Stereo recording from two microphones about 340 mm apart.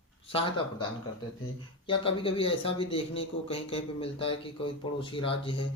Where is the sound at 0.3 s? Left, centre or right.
Centre.